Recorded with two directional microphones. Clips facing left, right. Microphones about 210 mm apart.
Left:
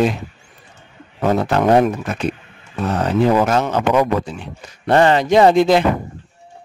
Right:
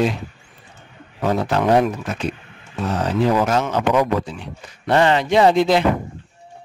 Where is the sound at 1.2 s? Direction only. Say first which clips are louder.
Left 3 dB; 50° left (ahead or behind).